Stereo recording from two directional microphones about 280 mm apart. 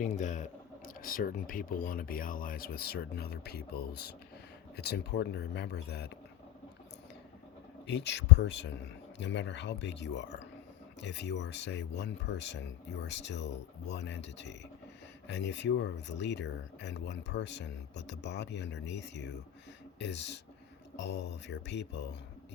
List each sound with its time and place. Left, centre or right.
0.0 s speech: left
7.9 s speech: left